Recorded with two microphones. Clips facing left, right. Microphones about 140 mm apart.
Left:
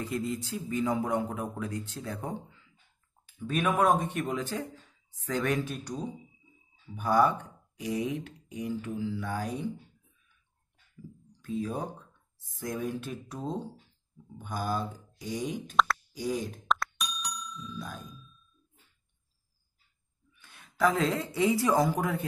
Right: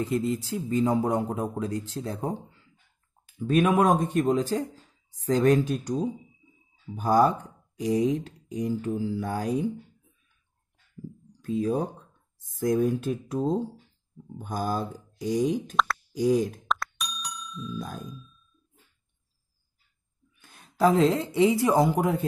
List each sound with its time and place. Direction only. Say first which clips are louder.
0.0 s speech: right 6 dB; 25° right (ahead or behind); by 5.9 s 40° right (ahead or behind)
7.0 s speech: right 3 dB; 40° right (ahead or behind)
11.6 s speech: right 7 dB; 40° right (ahead or behind)
15.7 s speech: even; centre (ahead or behind)
16.2 s speech: right 11 dB; 45° right (ahead or behind)
16.6 s plop: even; centre (ahead or behind)
17.7 s speech: right 5 dB; 45° right (ahead or behind)
18.1 s ding: right 6 dB; centre (ahead or behind)
20.3 s speech: right 4 dB; 40° right (ahead or behind); by 22.2 s 25° right (ahead or behind)